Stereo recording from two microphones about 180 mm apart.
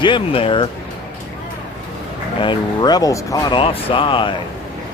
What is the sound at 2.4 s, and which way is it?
A man's voice, 25° left (ahead or behind).